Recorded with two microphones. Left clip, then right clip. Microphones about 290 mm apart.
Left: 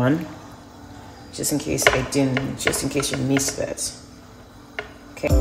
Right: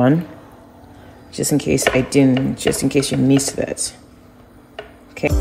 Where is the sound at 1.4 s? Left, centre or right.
Right.